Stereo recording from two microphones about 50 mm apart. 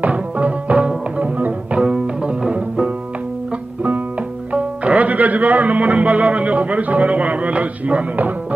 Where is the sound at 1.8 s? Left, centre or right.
Centre.